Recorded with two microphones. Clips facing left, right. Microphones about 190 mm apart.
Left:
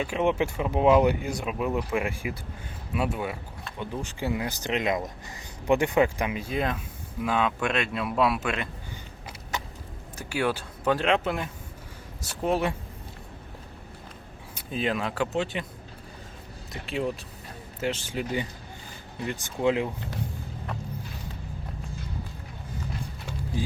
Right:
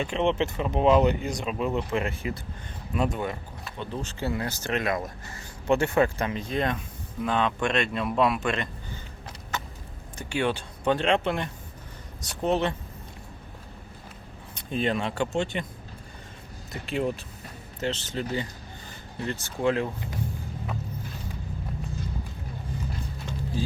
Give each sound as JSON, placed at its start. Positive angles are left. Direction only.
{"t": 0.0, "sound": "speech", "side_deg": 10}
{"t": 9.2, "sound": "a sound", "side_deg": 15}
{"t": 10.2, "sound": "speech", "side_deg": 5}
{"t": 14.5, "sound": "speech", "side_deg": 5}
{"t": 16.8, "sound": "speech", "side_deg": 0}
{"t": 23.6, "sound": "speech", "side_deg": 15}